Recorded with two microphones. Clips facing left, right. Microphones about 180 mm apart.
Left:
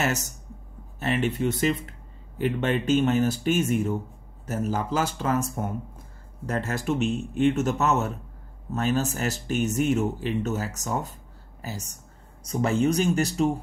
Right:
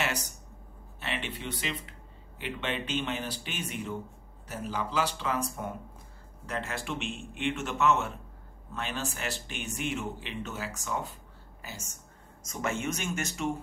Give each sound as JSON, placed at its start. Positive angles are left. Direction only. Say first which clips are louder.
{"t": 0.0, "sound": "speech", "louder": "left 6 dB", "side_deg": 45}